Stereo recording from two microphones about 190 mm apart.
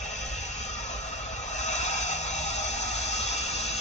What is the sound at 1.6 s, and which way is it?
Music, 35° left (ahead or behind).